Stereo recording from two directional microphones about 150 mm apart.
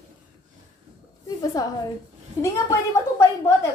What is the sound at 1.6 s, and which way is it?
A woman's voice, 25° left (ahead or behind).